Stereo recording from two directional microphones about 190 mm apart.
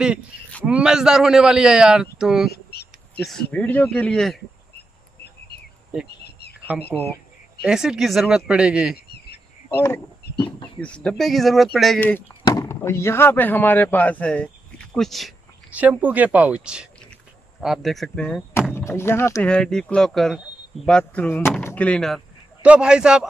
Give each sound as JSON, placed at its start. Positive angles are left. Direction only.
{"t": 0.7, "sound": "speech", "side_deg": -5}
{"t": 2.5, "sound": "a sound", "side_deg": 60}
{"t": 3.5, "sound": "speech", "side_deg": 10}
{"t": 6.0, "sound": "insect", "side_deg": 60}
{"t": 7.6, "sound": "speech", "side_deg": -5}
{"t": 8.9, "sound": "a sound", "side_deg": 60}
{"t": 9.8, "sound": "speech", "side_deg": 15}
{"t": 12.4, "sound": "speech", "side_deg": 15}